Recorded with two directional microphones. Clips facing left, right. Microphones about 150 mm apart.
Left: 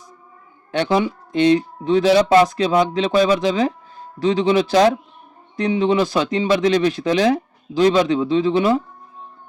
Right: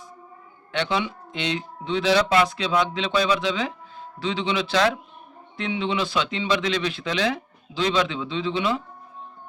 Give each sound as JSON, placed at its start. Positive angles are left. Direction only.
{"t": 0.7, "sound": "speech", "side_deg": 40}